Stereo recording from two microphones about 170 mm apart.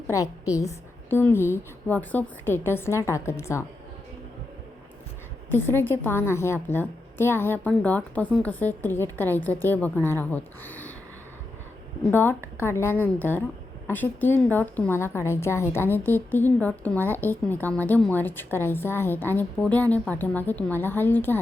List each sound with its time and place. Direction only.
0.1 s a woman's voice: 20° left (ahead or behind)
5.5 s a woman's voice: 10° left (ahead or behind)
12.1 s a woman's voice: 10° left (ahead or behind)